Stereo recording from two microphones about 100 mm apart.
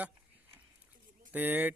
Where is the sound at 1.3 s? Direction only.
15° right (ahead or behind).